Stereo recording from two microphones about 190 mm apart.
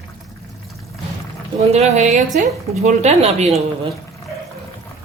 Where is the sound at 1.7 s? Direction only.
35° right (ahead or behind).